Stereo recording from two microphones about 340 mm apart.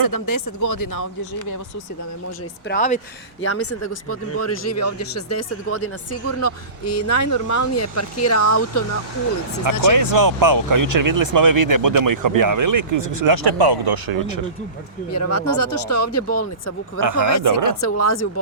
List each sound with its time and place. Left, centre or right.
0.0 s speech: left
2.6 s speech: left
3.4 s speech: left
9.6 s speech: right
15.1 s speech: left
17.0 s speech: right
17.7 s speech: left